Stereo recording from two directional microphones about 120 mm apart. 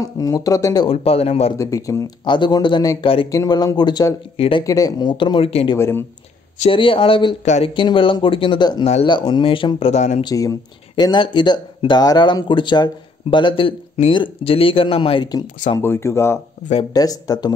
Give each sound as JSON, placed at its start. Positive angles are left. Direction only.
{"t": 0.0, "sound": "speech", "side_deg": 30}
{"t": 0.8, "sound": "speech", "side_deg": 55}
{"t": 1.6, "sound": "speech", "side_deg": 25}
{"t": 2.2, "sound": "speech", "side_deg": 40}
{"t": 3.3, "sound": "speech", "side_deg": 30}
{"t": 4.4, "sound": "speech", "side_deg": 45}
{"t": 4.6, "sound": "speech", "side_deg": 30}
{"t": 5.1, "sound": "speech", "side_deg": 45}
{"t": 5.8, "sound": "speech", "side_deg": 20}
{"t": 6.7, "sound": "speech", "side_deg": 45}
{"t": 10.2, "sound": "speech", "side_deg": 30}
{"t": 15.8, "sound": "speech", "side_deg": 20}